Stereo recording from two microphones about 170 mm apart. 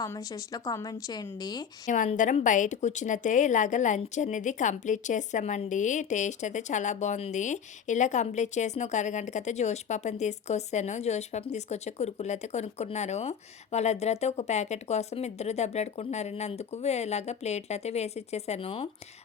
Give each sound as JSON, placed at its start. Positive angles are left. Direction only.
{"t": 0.0, "sound": "speech", "side_deg": 20}
{"t": 1.9, "sound": "a woman's voice", "side_deg": 50}